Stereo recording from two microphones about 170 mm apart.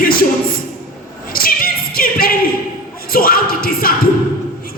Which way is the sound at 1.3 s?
60° left (ahead or behind).